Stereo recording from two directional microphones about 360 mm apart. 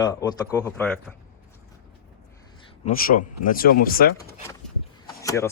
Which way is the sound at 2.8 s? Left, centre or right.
Left.